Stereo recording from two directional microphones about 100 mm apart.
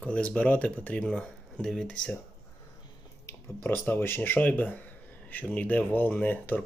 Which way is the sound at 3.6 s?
20° left (ahead or behind).